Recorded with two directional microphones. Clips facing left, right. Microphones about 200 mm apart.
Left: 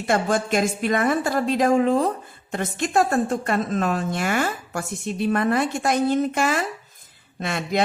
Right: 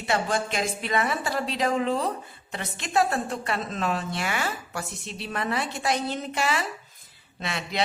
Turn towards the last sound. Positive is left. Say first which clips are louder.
# left 6 dB
turn(degrees=50)  # may be behind; listen again after turning